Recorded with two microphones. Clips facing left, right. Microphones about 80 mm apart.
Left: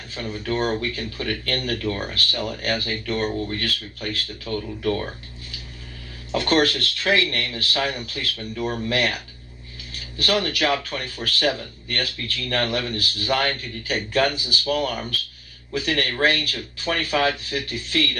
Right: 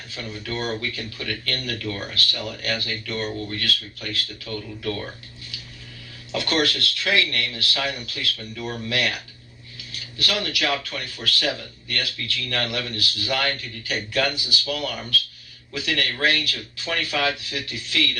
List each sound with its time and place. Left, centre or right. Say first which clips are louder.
0.1 s speech: left 5 dB; left
6.3 s speech: left 4 dB; left
10.2 s speech: left 4 dB; left